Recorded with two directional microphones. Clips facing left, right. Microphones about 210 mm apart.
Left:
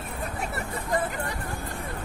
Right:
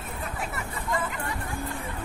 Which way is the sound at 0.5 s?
40° left (ahead or behind).